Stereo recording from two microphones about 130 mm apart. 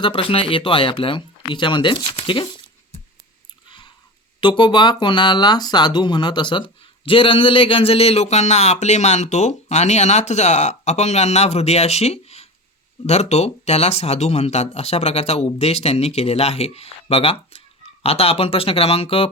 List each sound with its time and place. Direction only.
0.0 s speech: 40° left (ahead or behind)
3.7 s chewing: 35° left (ahead or behind)
4.4 s speech: 35° left (ahead or behind)